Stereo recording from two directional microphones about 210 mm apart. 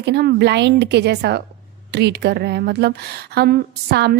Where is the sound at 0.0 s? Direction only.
50° right (ahead or behind).